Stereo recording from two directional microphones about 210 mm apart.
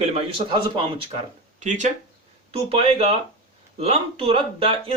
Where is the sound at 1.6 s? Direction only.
35° right (ahead or behind).